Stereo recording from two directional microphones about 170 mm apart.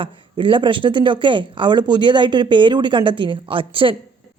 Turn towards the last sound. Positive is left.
turn(degrees=-30)  # may be behind; listen again after turning